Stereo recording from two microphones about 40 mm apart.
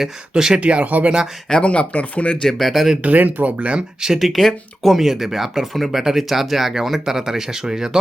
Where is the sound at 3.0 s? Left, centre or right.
Right.